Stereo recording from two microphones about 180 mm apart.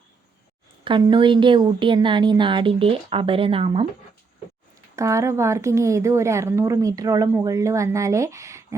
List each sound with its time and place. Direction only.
0.9 s a woman's voice: 25° right (ahead or behind)
4.9 s speech: 15° right (ahead or behind)